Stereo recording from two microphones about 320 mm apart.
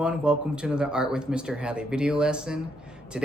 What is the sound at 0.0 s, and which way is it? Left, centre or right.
Speech, centre.